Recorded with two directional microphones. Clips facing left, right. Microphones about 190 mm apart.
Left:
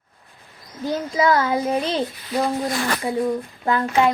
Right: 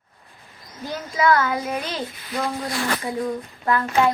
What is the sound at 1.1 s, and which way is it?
A child's voice, 20° left (ahead or behind).